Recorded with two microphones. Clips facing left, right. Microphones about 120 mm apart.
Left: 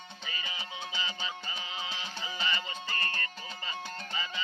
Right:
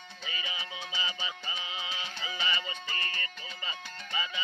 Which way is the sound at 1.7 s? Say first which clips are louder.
Even; 35° left (ahead or behind).